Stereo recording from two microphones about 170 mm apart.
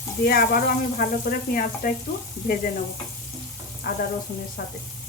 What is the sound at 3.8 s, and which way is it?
Speech, 60° left (ahead or behind).